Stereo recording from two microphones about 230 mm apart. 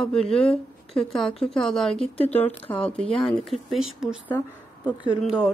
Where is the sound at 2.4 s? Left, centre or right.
Left.